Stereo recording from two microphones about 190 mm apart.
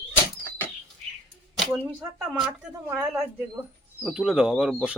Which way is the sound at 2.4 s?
5° right (ahead or behind).